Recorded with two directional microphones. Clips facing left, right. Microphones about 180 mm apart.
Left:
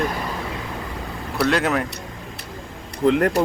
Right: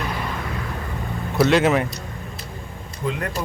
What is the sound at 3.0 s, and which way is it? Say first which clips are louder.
Speech: left 9 dB; 65° left (ahead or behind).